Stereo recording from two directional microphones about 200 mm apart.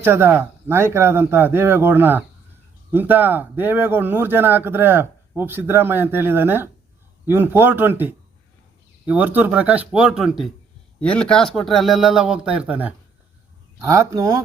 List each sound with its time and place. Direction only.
0.0 s a man's voice: 10° right (ahead or behind)